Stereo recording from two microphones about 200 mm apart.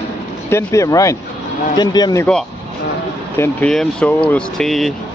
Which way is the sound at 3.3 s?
5° left (ahead or behind).